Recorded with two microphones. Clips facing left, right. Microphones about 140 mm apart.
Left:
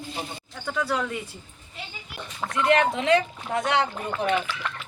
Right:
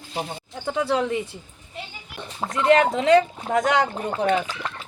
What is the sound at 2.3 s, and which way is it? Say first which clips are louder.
Speech: right 4 dB; 30° right (ahead or behind).